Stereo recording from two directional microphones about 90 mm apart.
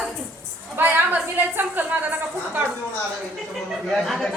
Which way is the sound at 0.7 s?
20° right (ahead or behind).